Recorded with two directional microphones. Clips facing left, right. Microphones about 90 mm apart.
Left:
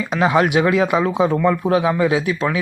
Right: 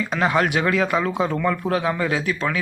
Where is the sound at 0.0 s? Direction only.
15° left (ahead or behind).